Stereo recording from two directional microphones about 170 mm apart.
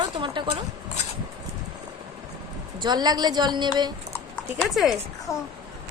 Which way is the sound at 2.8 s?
25° right (ahead or behind).